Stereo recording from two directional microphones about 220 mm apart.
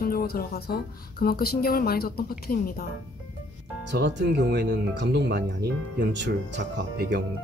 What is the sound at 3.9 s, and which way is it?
Speech, 50° right (ahead or behind).